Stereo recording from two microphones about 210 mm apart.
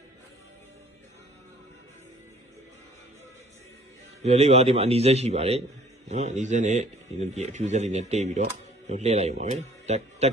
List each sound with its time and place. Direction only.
4.2 s a man's voice: 30° right (ahead or behind)